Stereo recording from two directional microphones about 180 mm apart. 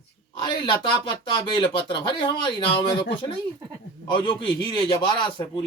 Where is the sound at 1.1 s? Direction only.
25° left (ahead or behind).